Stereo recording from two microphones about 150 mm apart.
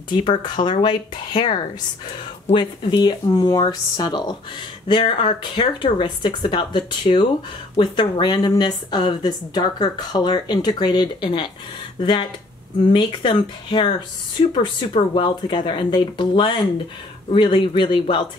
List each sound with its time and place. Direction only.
0.3 s speech: 30° left (ahead or behind)